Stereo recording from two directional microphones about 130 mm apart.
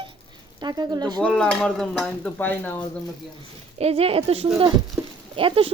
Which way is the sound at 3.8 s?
50° right (ahead or behind).